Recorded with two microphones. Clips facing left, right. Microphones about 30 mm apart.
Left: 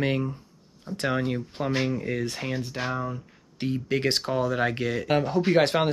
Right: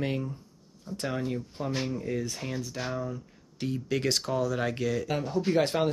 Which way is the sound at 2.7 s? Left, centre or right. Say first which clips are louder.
Left 3 dB; left.